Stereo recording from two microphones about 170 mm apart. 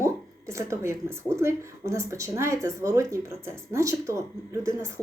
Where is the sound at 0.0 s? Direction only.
15° right (ahead or behind).